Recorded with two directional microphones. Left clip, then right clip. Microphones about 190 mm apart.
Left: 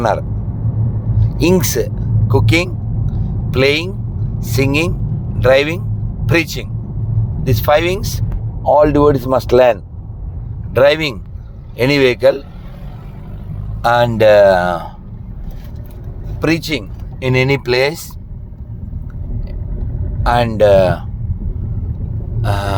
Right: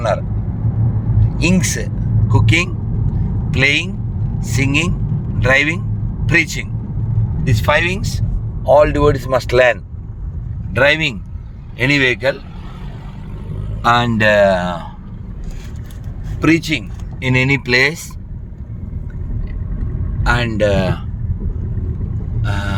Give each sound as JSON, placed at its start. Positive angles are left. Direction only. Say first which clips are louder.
{"t": 0.0, "sound": "speech", "louder": "left 2 dB", "side_deg": 25}
{"t": 1.2, "sound": "vehicle", "louder": "left 4 dB", "side_deg": 25}
{"t": 3.5, "sound": "speech", "louder": "left 1 dB", "side_deg": 20}
{"t": 13.8, "sound": "speech", "louder": "left 3 dB", "side_deg": 25}
{"t": 16.4, "sound": "speech", "louder": "right 2 dB", "side_deg": 25}
{"t": 20.2, "sound": "speech", "louder": "left 5 dB", "side_deg": 25}
{"t": 22.4, "sound": "speech", "louder": "left 5 dB", "side_deg": 30}